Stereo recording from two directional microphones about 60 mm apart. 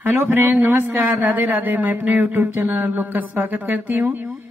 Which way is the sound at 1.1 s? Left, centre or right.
Right.